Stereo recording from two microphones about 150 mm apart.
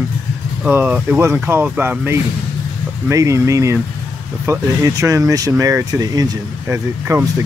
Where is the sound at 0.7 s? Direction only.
10° right (ahead or behind).